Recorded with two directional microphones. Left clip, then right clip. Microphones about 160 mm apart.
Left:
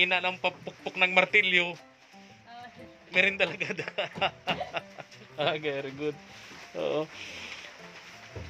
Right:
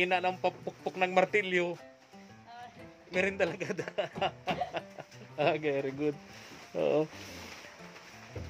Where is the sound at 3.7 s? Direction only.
25° right (ahead or behind).